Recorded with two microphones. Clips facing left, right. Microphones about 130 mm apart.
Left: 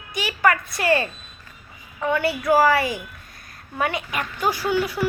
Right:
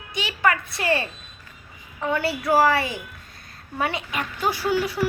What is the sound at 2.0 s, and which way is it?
A woman's voice, 30° right (ahead or behind).